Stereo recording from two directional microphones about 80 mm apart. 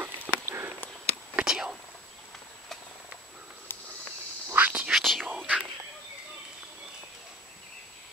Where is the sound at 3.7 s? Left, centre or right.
Left.